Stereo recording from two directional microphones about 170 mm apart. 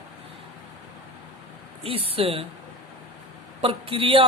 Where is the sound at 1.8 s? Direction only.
35° right (ahead or behind).